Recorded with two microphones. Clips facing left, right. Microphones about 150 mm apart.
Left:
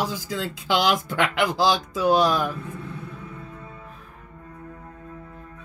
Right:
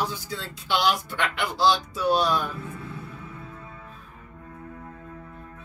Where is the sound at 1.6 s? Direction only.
90° left.